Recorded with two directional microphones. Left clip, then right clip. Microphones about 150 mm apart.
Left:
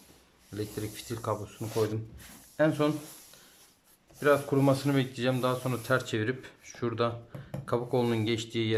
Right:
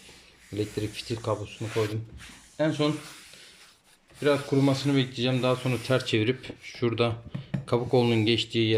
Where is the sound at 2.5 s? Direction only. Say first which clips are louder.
Even; centre (ahead or behind).